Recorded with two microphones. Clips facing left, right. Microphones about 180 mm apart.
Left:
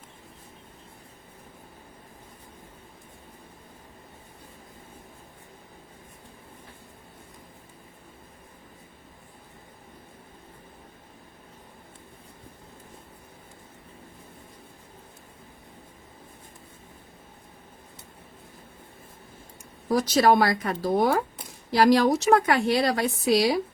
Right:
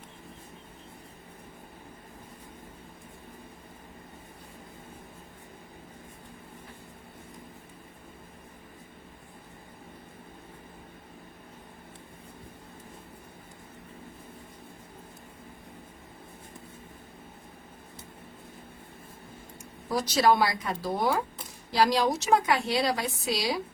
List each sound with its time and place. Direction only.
20.0 s a woman's voice: 55° left (ahead or behind)